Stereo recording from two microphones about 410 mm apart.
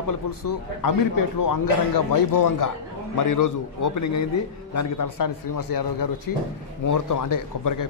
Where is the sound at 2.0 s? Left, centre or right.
Left.